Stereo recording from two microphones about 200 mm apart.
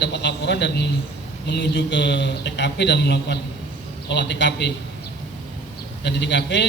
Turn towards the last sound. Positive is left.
turn(degrees=60)  # may be behind; listen again after turning